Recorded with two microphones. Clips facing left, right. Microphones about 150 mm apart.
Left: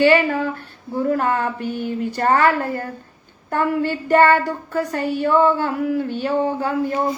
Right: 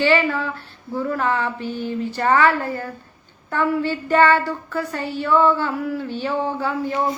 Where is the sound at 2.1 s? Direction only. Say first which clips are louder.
Left 1 dB; 45° left (ahead or behind).